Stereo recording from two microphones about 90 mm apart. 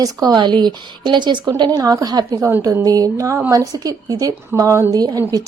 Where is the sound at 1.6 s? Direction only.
45° right (ahead or behind).